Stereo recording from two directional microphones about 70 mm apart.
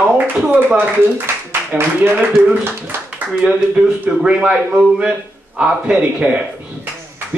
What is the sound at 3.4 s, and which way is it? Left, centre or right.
Speech, right.